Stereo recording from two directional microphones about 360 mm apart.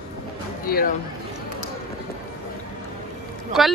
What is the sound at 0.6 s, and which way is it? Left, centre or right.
Speech, left.